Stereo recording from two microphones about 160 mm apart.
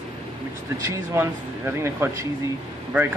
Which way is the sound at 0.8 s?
15° right (ahead or behind).